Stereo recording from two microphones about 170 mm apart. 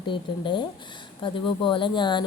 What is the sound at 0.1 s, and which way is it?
Speech, 30° left (ahead or behind).